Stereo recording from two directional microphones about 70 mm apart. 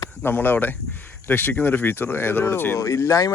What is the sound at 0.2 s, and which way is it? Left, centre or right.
Speech, left.